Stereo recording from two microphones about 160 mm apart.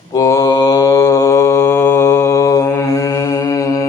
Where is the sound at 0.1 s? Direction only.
20° left (ahead or behind).